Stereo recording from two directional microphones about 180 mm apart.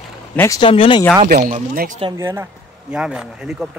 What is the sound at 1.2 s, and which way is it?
Speech, 45° right (ahead or behind).